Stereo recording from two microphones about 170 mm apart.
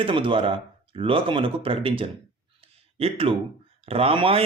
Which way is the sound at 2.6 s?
35° right (ahead or behind).